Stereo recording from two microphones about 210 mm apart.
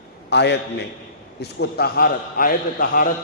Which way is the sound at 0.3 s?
55° left (ahead or behind).